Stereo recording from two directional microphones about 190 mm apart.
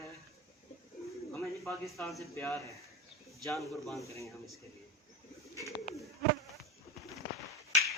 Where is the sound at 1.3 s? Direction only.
15° left (ahead or behind).